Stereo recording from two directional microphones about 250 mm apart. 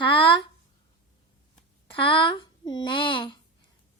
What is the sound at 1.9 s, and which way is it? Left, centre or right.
A child's voice, left.